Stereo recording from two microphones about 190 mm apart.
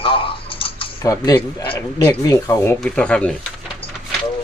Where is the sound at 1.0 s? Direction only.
15° left (ahead or behind).